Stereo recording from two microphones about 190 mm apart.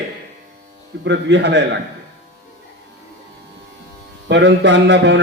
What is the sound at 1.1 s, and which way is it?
Speech, 65° right (ahead or behind).